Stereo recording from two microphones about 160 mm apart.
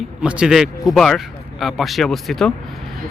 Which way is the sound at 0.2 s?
5° right (ahead or behind).